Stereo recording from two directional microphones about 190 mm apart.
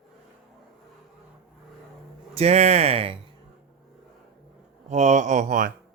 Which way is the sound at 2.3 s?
35° right (ahead or behind).